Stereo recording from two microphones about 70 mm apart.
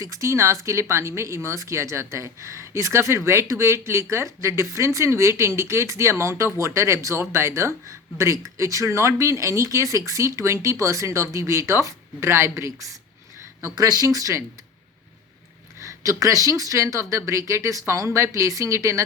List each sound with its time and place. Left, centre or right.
0.0 s speech: right
13.7 s speech: right
15.9 s speech: right
18.3 s speech: right